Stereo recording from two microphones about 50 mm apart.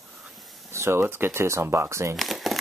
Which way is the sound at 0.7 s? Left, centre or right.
Right.